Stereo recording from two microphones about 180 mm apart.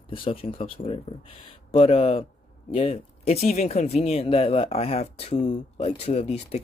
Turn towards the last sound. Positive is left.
turn(degrees=35)  # may be behind; listen again after turning